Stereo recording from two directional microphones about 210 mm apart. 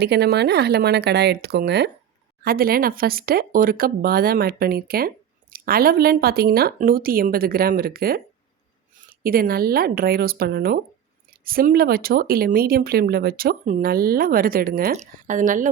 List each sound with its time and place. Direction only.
0.0 s speech: 50° right (ahead or behind)